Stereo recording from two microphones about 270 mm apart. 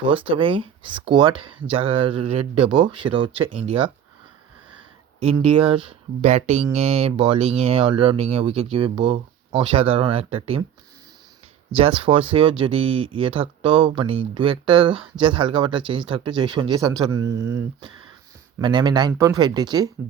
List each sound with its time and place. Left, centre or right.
0.0 s speech: centre
5.2 s speech: right
11.7 s speech: centre